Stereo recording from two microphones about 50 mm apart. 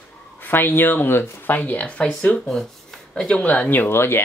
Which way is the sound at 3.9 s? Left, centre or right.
Left.